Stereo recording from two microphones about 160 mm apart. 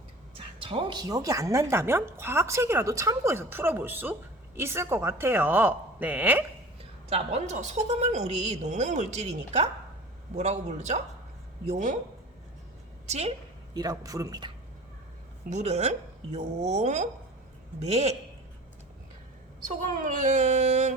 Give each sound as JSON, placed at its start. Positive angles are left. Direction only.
{"t": 0.3, "sound": "speech", "side_deg": -35}
{"t": 7.1, "sound": "a woman's voice", "side_deg": -40}
{"t": 13.1, "sound": "a woman's voice", "side_deg": -45}
{"t": 13.7, "sound": "speech", "side_deg": -25}
{"t": 15.4, "sound": "a woman's voice", "side_deg": -45}
{"t": 20.1, "sound": "a woman's voice", "side_deg": -50}